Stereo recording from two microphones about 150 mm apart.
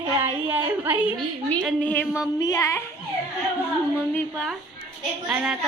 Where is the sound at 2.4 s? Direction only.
25° left (ahead or behind).